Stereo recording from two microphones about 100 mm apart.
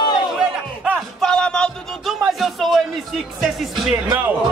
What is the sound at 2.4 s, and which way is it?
Speech, centre (ahead or behind).